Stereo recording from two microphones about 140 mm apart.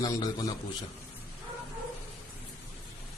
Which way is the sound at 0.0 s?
25° left (ahead or behind).